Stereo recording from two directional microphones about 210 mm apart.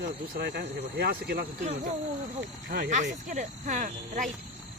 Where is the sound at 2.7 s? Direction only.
40° right (ahead or behind).